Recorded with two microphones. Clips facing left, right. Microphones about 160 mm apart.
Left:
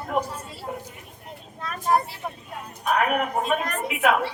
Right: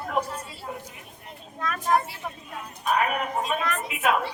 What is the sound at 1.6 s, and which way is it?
Speech, 35° left (ahead or behind).